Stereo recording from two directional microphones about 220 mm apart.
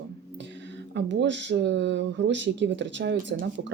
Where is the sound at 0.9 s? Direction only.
55° right (ahead or behind).